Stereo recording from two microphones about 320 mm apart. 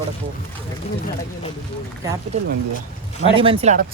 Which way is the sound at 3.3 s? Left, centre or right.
Centre.